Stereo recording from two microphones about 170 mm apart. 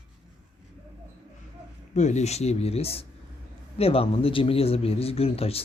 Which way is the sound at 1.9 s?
45° left (ahead or behind).